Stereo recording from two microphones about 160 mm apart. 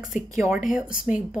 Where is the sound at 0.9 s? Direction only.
60° left (ahead or behind).